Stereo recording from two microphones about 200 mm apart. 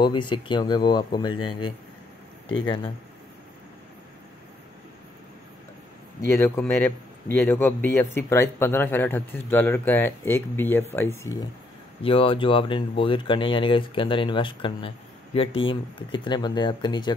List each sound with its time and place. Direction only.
0.0 s speech: 25° left (ahead or behind)
6.2 s speech: 15° left (ahead or behind)
12.0 s speech: 25° left (ahead or behind)